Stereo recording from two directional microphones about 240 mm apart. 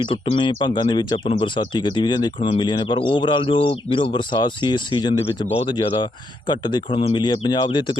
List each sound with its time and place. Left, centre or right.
0.0 s speech: left